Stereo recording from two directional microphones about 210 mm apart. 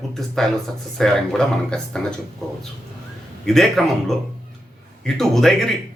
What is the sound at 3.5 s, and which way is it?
A man's voice, centre (ahead or behind).